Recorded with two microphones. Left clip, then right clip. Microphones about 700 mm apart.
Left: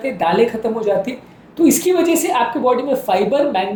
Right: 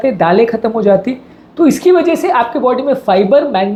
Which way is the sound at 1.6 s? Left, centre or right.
Right.